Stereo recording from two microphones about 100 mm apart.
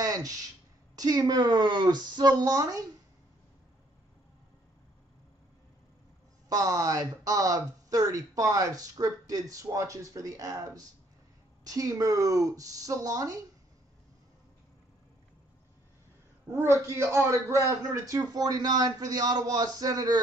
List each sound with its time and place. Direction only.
0.0 s a sound: 35° right (ahead or behind)
0.9 s speech: 35° right (ahead or behind)
6.5 s a man's voice: 35° right (ahead or behind)
16.5 s a man's voice: 30° right (ahead or behind)